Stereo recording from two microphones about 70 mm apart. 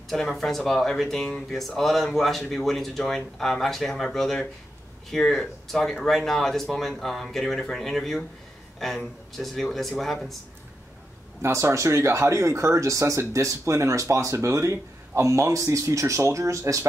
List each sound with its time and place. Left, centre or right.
0.1 s speech: centre
11.4 s speech: right